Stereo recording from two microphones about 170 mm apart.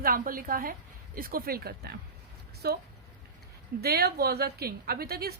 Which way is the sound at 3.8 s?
65° right (ahead or behind).